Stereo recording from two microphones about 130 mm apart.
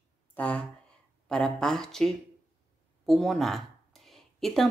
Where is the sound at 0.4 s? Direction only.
10° left (ahead or behind).